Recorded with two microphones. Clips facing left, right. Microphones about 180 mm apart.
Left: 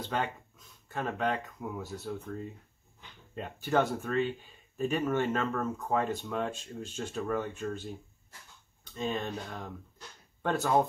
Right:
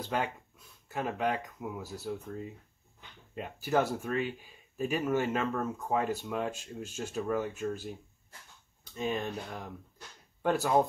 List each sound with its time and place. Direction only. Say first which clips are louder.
0.1 s speech: right 1 dB; 10° right (ahead or behind)
3.3 s speech: left 1 dB; 5° right (ahead or behind)
8.9 s speech: even; 10° right (ahead or behind)